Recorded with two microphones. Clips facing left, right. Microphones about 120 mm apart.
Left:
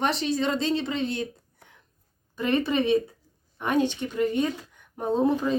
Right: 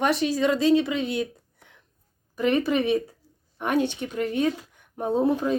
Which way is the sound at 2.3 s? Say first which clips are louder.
Right 2 dB; 10° right (ahead or behind).